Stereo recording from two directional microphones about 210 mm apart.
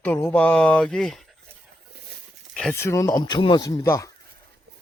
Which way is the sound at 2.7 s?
15° left (ahead or behind).